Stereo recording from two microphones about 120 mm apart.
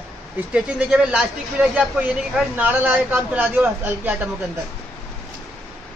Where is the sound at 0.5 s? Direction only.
5° right (ahead or behind).